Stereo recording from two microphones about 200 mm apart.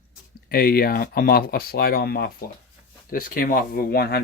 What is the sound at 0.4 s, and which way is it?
Speech, 50° left (ahead or behind).